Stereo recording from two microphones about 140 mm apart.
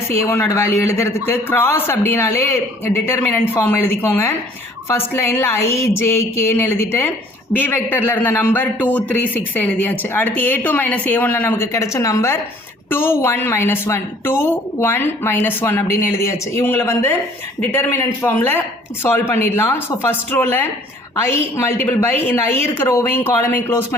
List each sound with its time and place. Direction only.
0.1 s a man's voice: 20° left (ahead or behind)